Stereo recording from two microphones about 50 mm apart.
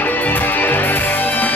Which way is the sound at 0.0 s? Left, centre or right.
Left.